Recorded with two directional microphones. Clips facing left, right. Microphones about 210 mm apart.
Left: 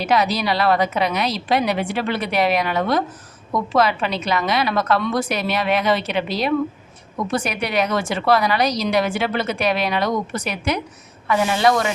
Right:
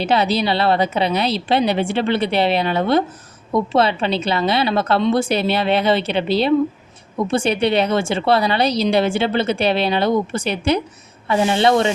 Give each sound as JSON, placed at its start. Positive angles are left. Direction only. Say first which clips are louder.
{"t": 0.0, "sound": "a woman's voice", "louder": "right 2 dB", "side_deg": -30}